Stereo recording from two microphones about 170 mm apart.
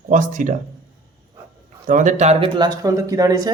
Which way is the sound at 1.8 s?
50° right (ahead or behind).